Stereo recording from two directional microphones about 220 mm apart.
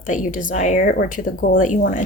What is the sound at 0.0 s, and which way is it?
Speech, 35° left (ahead or behind).